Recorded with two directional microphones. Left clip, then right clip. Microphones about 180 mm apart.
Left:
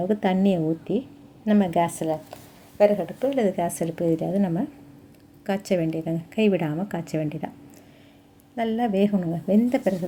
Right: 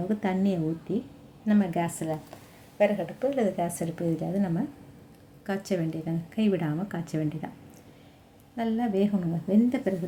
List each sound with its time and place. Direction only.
0.1 s a woman's voice: 25° left (ahead or behind)
8.5 s a woman's voice: 30° left (ahead or behind)